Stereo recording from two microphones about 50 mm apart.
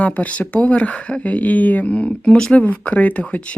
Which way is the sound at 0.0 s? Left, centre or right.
Left.